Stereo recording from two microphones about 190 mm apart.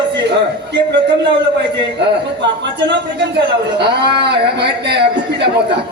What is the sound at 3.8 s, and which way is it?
A man's voice, 60° right (ahead or behind).